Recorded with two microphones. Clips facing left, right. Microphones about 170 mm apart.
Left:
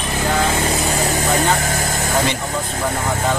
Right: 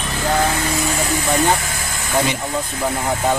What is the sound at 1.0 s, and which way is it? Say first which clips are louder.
Speech: right 1 dB; 45° left (ahead or behind).